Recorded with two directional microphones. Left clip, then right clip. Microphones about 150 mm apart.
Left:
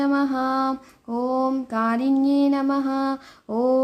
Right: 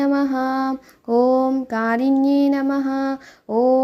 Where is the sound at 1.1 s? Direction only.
35° right (ahead or behind).